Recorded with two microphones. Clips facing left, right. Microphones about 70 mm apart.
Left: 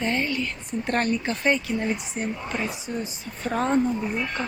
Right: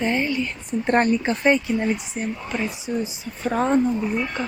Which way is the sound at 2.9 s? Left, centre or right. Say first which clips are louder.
Right 5 dB; centre.